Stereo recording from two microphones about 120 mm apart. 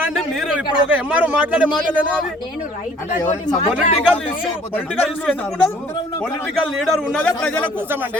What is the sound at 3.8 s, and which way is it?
Speech, 60° left (ahead or behind).